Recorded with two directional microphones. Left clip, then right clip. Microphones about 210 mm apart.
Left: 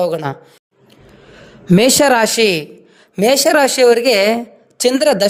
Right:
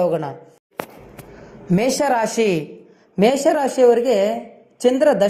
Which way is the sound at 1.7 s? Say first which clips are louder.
Left 7 dB; 55° left (ahead or behind).